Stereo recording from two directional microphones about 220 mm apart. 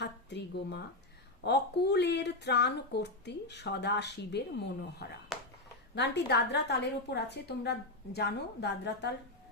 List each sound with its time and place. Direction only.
0.0 s speech: 50° left (ahead or behind)